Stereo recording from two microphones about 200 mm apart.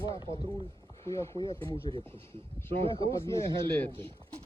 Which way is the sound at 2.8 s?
30° right (ahead or behind).